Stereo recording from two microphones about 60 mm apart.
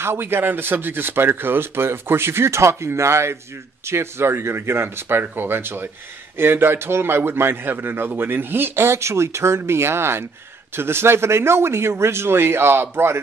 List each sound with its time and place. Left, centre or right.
0.0 s a man's voice: right